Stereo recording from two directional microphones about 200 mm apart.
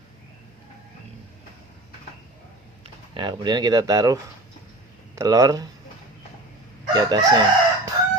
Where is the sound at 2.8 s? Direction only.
25° right (ahead or behind).